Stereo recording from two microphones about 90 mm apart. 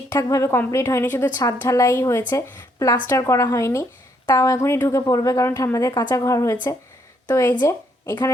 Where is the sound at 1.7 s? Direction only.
35° left (ahead or behind).